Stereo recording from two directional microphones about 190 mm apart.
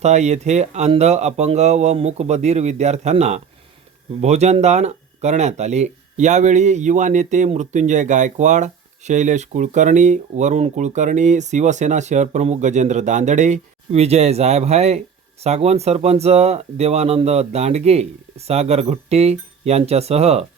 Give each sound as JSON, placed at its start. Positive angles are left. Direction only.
{"t": 0.0, "sound": "speech", "side_deg": -35}